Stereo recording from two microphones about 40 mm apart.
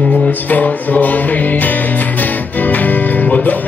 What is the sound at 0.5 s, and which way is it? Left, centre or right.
Music, left.